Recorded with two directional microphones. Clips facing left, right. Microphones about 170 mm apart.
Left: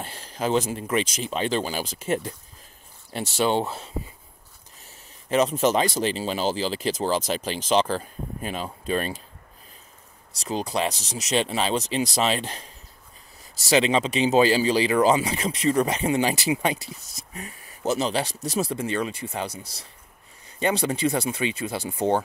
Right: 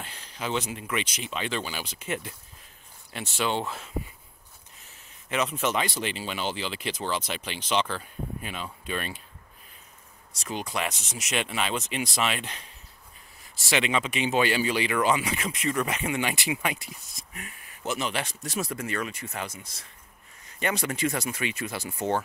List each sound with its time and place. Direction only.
0.0 s speech: 40° left (ahead or behind)
5.3 s speech: 35° left (ahead or behind)
10.4 s speech: 35° left (ahead or behind)